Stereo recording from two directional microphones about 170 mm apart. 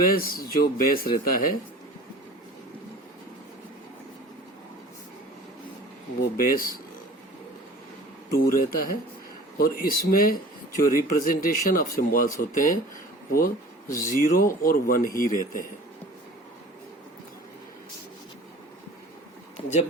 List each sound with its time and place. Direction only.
0.0 s speech: 60° left (ahead or behind)
6.4 s speech: 60° left (ahead or behind)
8.4 s speech: 60° left (ahead or behind)